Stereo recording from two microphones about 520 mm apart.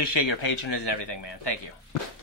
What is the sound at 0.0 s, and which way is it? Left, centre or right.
Speech, left.